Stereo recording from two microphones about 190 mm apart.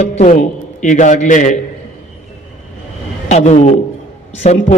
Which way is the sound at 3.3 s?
35° left (ahead or behind).